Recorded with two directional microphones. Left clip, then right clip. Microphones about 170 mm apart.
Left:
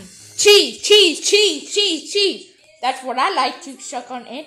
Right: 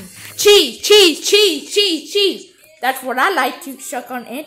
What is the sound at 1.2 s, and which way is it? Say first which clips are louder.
Speech: right 2 dB; 5° right (ahead or behind).